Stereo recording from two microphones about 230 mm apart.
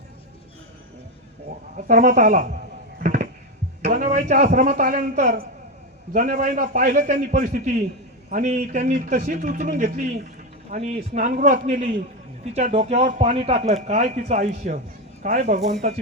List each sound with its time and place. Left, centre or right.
1.7 s a man's voice: right
3.0 s a sound: right
3.8 s a man's voice: right